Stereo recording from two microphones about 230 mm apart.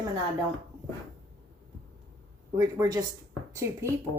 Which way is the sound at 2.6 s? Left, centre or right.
Centre.